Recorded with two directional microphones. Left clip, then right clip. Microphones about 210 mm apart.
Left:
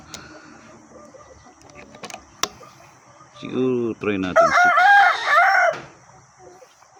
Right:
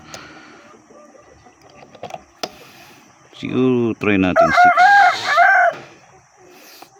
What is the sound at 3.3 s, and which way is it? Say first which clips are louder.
A man's voice: right 5 dB; 45° right (ahead or behind).